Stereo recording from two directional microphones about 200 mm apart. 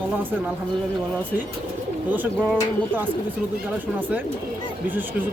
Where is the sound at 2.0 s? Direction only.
10° right (ahead or behind).